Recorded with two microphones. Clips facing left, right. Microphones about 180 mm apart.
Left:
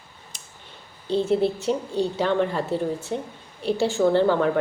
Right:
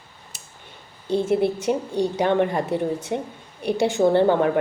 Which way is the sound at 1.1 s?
15° right (ahead or behind).